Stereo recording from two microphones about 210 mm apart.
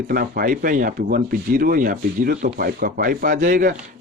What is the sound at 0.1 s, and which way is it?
Speech, 45° right (ahead or behind).